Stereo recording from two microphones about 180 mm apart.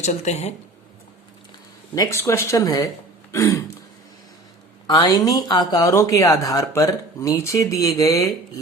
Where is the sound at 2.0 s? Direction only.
15° left (ahead or behind).